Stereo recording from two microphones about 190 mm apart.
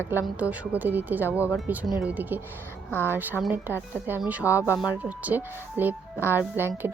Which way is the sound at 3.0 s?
10° right (ahead or behind).